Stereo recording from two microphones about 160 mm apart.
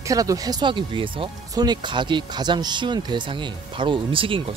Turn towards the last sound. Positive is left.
turn(degrees=-35)  # may be behind; listen again after turning